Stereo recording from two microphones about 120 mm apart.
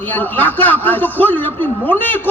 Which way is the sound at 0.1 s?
15° left (ahead or behind).